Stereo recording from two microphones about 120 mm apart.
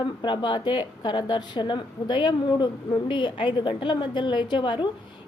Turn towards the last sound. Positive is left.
turn(degrees=40)  # may be behind; listen again after turning